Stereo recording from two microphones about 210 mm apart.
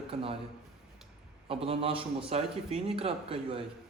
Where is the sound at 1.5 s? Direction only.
25° right (ahead or behind).